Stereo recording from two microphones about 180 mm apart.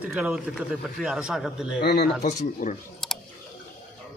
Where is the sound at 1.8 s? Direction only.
65° left (ahead or behind).